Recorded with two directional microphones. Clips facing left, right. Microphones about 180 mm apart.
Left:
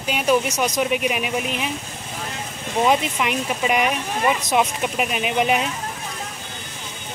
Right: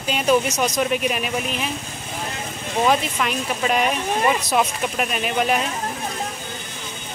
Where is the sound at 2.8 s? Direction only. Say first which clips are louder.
Left 1 dB; 15° left (ahead or behind).